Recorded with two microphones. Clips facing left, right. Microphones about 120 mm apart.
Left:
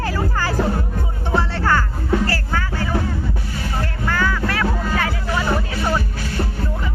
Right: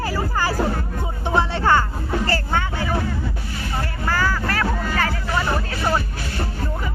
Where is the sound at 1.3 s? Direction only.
20° right (ahead or behind).